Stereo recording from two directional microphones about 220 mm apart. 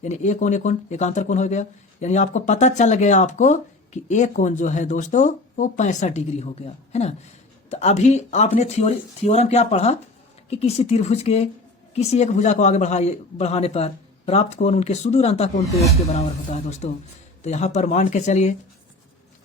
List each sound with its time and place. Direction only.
0.0 s a man's voice: 30° left (ahead or behind)
16.8 s speech: 35° left (ahead or behind)